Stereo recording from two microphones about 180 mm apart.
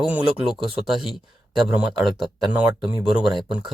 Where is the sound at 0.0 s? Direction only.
5° right (ahead or behind).